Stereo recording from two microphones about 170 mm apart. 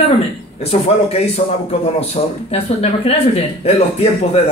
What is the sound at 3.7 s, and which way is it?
Speech, 40° left (ahead or behind).